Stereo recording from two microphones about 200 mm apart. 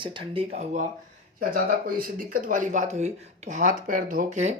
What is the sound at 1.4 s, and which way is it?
Speech, 45° right (ahead or behind).